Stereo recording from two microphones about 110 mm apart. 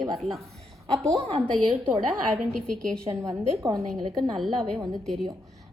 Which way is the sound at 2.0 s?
Centre (ahead or behind).